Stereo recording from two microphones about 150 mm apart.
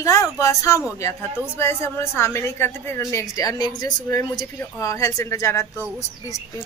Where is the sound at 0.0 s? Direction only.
20° left (ahead or behind).